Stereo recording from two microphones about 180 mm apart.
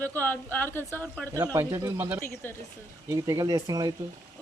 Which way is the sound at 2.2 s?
15° left (ahead or behind).